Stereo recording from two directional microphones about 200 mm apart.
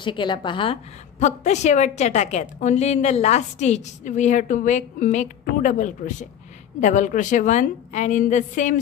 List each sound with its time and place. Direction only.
0.0 s a woman's voice: 25° left (ahead or behind)